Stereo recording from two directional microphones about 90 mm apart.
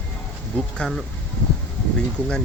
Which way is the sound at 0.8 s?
5° left (ahead or behind).